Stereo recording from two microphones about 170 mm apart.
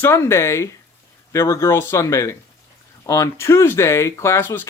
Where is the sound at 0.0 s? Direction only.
15° left (ahead or behind).